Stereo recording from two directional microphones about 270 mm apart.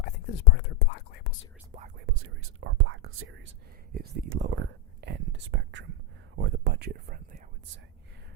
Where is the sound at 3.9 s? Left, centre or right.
Right.